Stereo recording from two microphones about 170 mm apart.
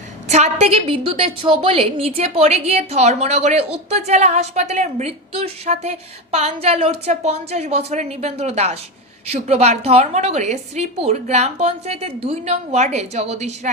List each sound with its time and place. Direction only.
0.3 s a woman's voice: 40° right (ahead or behind)